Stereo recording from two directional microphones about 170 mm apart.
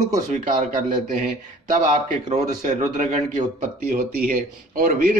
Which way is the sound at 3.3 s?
60° right (ahead or behind).